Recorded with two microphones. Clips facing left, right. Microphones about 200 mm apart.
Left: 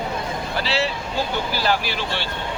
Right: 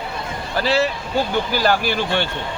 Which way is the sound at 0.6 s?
45° right (ahead or behind).